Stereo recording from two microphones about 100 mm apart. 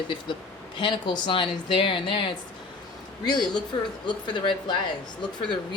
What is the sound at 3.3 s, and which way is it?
Speech, 45° left (ahead or behind).